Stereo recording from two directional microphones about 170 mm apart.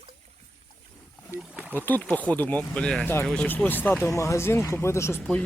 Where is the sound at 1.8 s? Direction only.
10° left (ahead or behind).